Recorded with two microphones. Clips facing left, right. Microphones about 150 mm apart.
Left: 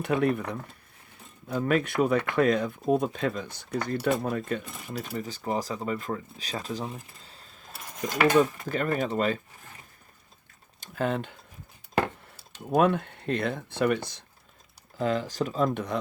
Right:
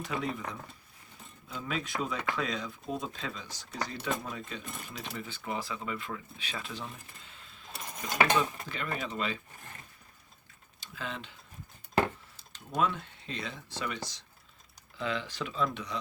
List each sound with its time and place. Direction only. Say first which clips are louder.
0.0 s speech: left 9 dB; 60° left (ahead or behind)
4.9 s speech: left 10 dB; 40° left (ahead or behind)
10.8 s a sound: left 12 dB; 50° left (ahead or behind)
12.7 s speech: left 8 dB; 55° left (ahead or behind)
14.9 s speech: left 8 dB; 45° left (ahead or behind)